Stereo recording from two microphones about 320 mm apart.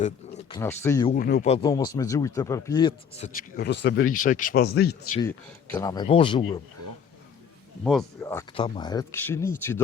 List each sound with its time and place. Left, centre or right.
0.5 s speech: centre
1.1 s speech: left
5.2 s speech: centre
7.9 s speech: centre